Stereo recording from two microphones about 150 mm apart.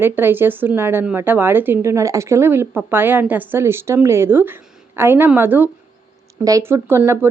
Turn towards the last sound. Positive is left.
turn(degrees=-15)  # may be behind; listen again after turning